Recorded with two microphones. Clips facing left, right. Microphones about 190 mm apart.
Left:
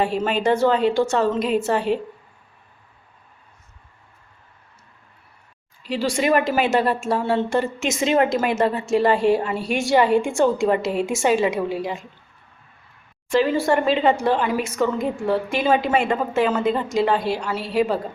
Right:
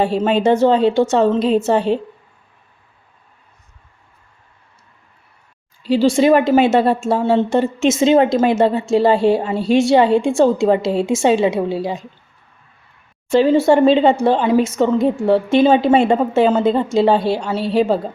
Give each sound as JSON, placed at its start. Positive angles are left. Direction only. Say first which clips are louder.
{"t": 0.0, "sound": "a woman's voice", "louder": "right 5 dB", "side_deg": -30}
{"t": 5.8, "sound": "a woman's voice", "louder": "right 9 dB", "side_deg": -30}
{"t": 13.4, "sound": "a woman's voice", "louder": "right 9 dB", "side_deg": -25}